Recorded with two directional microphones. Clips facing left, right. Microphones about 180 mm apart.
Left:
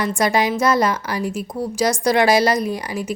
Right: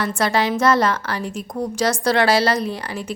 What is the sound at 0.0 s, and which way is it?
A woman's voice, 15° left (ahead or behind).